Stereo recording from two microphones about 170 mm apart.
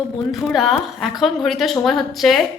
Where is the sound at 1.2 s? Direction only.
Centre (ahead or behind).